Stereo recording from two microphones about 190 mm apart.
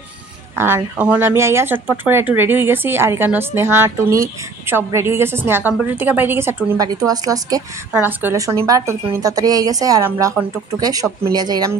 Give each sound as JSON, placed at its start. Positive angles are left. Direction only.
{"t": 0.6, "sound": "a woman's voice", "side_deg": -10}